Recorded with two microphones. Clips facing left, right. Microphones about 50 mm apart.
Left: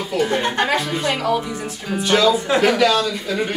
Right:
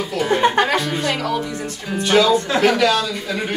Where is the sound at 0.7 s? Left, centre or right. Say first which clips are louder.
Even; centre.